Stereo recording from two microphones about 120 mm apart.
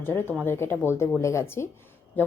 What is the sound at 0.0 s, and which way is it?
A woman's voice, 20° left (ahead or behind).